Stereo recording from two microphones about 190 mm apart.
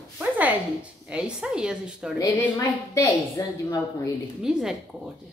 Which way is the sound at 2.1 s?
15° left (ahead or behind).